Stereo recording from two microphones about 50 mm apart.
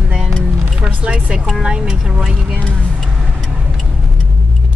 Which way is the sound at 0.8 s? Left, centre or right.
Right.